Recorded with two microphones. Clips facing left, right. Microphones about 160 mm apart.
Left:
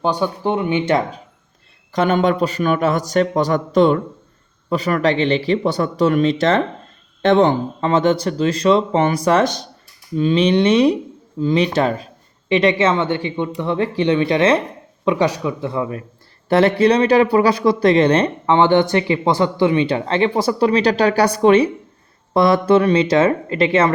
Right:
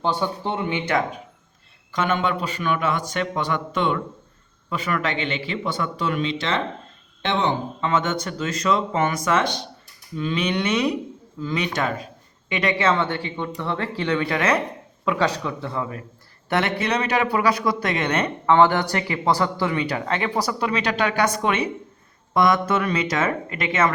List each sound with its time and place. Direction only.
0.0 s speech: 15° left (ahead or behind)
1.9 s speech: 40° left (ahead or behind)
10.2 s speech: 30° left (ahead or behind)
16.5 s speech: 30° left (ahead or behind)